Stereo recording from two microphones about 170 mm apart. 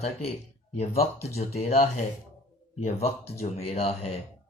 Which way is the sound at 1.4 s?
40° left (ahead or behind).